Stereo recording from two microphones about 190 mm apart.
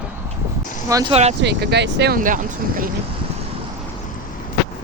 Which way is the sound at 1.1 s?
35° right (ahead or behind).